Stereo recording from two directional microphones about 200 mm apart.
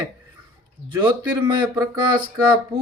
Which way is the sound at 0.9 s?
20° right (ahead or behind).